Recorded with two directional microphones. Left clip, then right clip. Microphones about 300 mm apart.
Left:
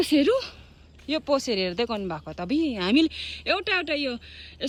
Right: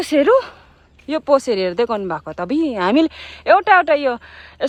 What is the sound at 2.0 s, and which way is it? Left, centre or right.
Speech, right.